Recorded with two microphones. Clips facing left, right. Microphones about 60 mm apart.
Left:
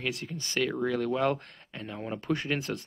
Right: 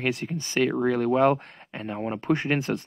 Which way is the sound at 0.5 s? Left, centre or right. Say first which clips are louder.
Right 5 dB; right.